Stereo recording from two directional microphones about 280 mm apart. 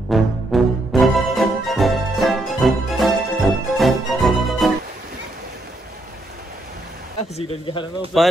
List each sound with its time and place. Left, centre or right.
0.1 s music: centre
7.3 s speech: centre